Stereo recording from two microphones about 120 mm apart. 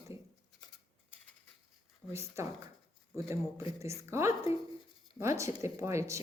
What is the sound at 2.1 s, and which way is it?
Speech, 25° right (ahead or behind).